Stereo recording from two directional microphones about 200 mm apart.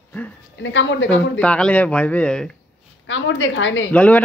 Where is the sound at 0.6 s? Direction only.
65° left (ahead or behind).